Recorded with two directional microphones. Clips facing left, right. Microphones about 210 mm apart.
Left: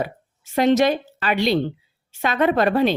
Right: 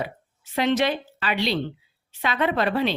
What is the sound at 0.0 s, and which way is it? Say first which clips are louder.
A woman's voice: left 4 dB; 45° left (ahead or behind).